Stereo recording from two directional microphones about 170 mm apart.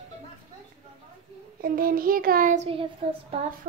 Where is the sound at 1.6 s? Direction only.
55° right (ahead or behind); by 3.3 s 35° right (ahead or behind).